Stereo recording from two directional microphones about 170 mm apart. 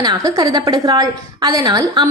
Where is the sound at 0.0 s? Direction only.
25° right (ahead or behind).